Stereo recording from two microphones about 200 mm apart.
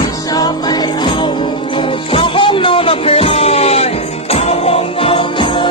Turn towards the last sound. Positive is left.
turn(degrees=25)  # may be behind; listen again after turning